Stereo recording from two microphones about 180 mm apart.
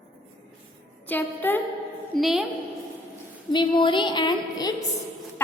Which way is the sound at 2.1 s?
Centre (ahead or behind).